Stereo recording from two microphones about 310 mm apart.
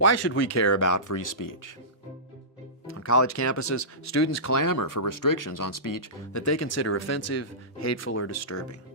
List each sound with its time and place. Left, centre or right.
0.0 s speech: left
3.0 s speech: left